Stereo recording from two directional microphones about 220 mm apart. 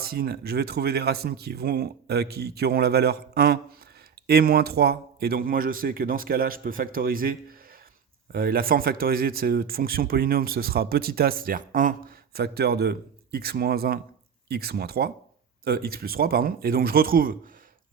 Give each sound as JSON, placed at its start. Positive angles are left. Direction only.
{"t": 0.0, "sound": "speech", "side_deg": -45}